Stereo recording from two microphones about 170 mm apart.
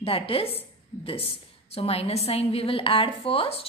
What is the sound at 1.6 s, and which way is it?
A woman's voice, 35° left (ahead or behind).